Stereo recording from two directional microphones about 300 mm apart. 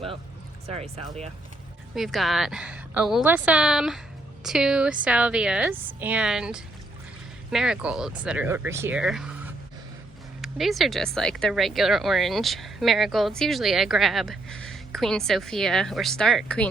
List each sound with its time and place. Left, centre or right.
0.8 s speech: right
2.0 s speech: centre